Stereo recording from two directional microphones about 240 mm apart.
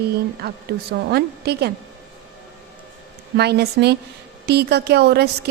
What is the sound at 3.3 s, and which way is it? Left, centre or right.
A woman's voice, right.